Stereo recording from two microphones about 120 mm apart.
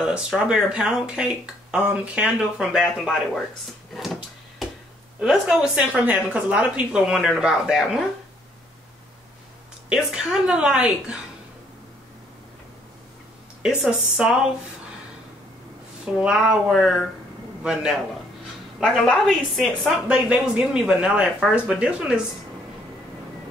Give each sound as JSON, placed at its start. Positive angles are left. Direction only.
{"t": 0.0, "sound": "speech", "side_deg": -5}
{"t": 3.9, "sound": "a sound", "side_deg": 0}
{"t": 5.2, "sound": "a woman's voice", "side_deg": -5}
{"t": 9.8, "sound": "speech", "side_deg": -5}
{"t": 13.6, "sound": "speech", "side_deg": -5}
{"t": 16.2, "sound": "a woman's voice", "side_deg": -5}
{"t": 18.8, "sound": "a woman's voice", "side_deg": 5}
{"t": 20.1, "sound": "speech", "side_deg": -10}